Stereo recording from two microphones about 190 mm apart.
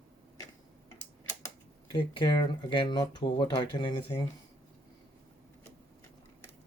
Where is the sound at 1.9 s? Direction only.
25° left (ahead or behind).